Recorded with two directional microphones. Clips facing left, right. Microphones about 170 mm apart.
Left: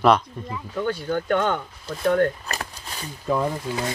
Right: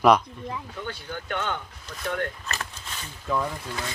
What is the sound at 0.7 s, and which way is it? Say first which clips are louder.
Speech: left 10 dB; 50° left (ahead or behind).